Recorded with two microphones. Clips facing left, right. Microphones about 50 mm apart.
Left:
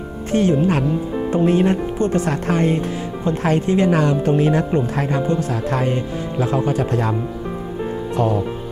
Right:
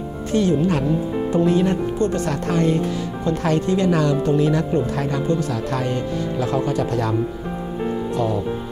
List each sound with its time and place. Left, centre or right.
0.3 s speech: left
8.2 s speech: left